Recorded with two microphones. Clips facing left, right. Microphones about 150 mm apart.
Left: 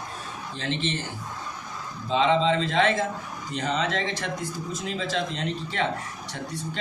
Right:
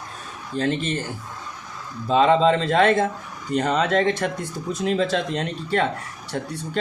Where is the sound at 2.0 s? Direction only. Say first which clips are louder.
Right 5 dB; 50° right (ahead or behind).